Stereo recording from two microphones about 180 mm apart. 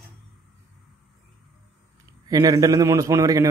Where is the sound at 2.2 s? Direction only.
20° right (ahead or behind).